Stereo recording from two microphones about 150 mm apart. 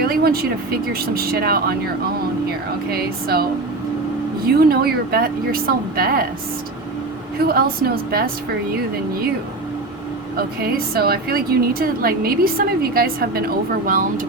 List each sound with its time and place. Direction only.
0.0 s speech: 90° right
4.4 s a woman's voice: 90° right
7.3 s speech: 90° right
10.3 s a woman's voice: 90° right
13.8 s speech: 65° right (ahead or behind)